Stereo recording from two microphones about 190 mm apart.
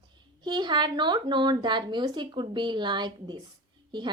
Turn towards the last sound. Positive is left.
turn(degrees=-25)  # may be behind; listen again after turning